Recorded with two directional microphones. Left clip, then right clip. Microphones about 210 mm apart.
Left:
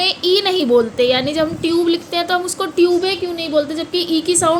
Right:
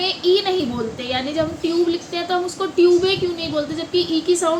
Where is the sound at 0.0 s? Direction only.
55° left (ahead or behind).